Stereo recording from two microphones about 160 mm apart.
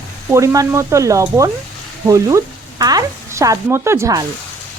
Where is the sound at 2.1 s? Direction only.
20° right (ahead or behind).